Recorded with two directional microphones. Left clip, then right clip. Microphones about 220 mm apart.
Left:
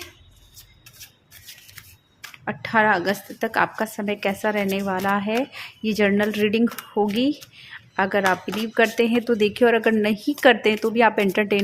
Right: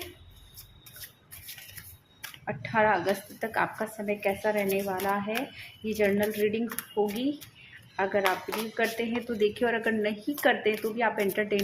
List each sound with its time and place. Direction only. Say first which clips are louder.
2.4 s a woman's voice: left 6 dB; 50° left (ahead or behind)